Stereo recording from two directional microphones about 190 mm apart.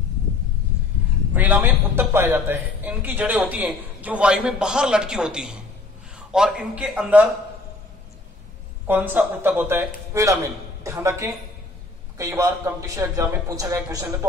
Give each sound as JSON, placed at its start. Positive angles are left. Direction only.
{"t": 1.3, "sound": "a man's voice", "side_deg": -10}
{"t": 8.8, "sound": "speech", "side_deg": -10}